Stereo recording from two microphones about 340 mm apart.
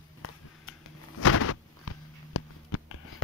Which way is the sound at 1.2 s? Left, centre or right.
Left.